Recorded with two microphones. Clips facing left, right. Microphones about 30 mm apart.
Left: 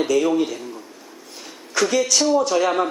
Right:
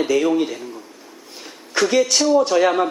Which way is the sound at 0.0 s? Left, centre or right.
Centre.